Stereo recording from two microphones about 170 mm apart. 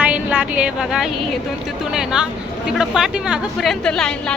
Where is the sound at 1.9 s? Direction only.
5° right (ahead or behind).